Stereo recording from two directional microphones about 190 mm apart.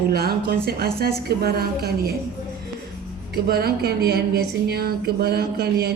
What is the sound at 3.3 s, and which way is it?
Speech, 55° right (ahead or behind).